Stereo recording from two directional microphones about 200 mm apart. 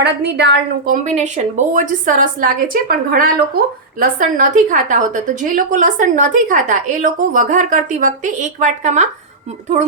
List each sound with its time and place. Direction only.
0.0 s a woman's voice: 60° right (ahead or behind)
1.0 s a woman's voice: 35° right (ahead or behind)